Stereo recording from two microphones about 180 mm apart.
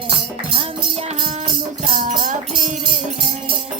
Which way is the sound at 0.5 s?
35° right (ahead or behind).